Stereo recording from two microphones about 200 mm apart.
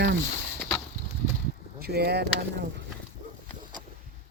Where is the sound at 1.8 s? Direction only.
55° right (ahead or behind).